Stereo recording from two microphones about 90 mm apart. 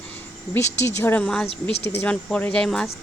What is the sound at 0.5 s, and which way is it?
Speech, 30° left (ahead or behind).